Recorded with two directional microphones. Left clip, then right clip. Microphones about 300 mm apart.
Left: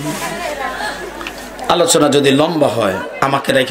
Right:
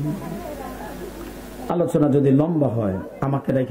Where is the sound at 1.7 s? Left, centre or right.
Centre.